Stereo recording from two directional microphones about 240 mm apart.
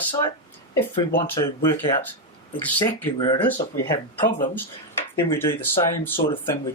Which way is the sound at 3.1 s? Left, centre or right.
Centre.